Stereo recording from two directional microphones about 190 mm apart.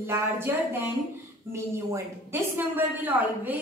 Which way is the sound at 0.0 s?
15° right (ahead or behind).